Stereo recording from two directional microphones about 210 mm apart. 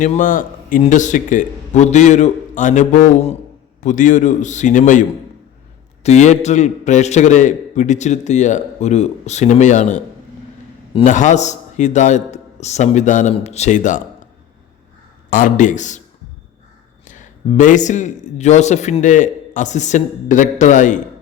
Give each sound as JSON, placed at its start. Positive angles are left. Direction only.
{"t": 0.0, "sound": "a man's voice", "side_deg": 40}
{"t": 10.9, "sound": "a man's voice", "side_deg": 35}
{"t": 15.3, "sound": "a man's voice", "side_deg": 40}
{"t": 17.1, "sound": "a man's voice", "side_deg": 35}